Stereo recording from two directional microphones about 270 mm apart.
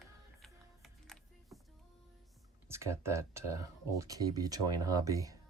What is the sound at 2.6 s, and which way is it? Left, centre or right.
Speech, centre.